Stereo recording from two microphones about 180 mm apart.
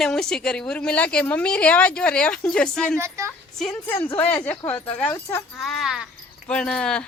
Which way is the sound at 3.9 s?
25° left (ahead or behind).